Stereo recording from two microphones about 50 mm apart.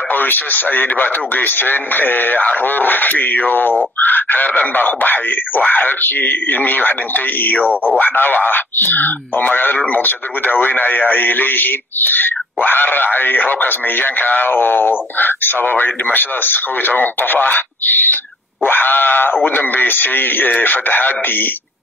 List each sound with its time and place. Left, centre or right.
0.1 s speech: left
4.0 s a sound: left
4.7 s speech: left